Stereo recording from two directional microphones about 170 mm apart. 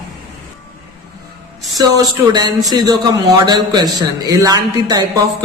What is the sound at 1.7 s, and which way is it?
A man's voice, 25° right (ahead or behind).